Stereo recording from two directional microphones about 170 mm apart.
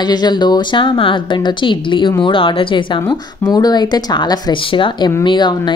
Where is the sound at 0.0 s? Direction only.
25° left (ahead or behind).